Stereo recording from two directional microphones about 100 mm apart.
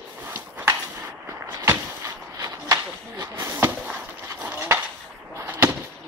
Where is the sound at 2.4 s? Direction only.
40° right (ahead or behind).